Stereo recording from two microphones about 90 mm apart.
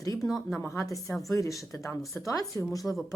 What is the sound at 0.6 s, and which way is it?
Speech, 30° left (ahead or behind).